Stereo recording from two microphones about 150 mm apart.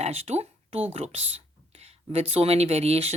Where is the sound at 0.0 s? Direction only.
45° right (ahead or behind).